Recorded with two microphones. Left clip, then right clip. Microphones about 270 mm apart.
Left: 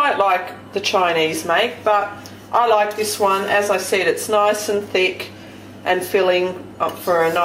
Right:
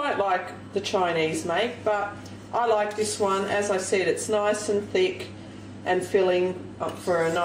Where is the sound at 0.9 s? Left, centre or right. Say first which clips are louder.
Left 8 dB; left.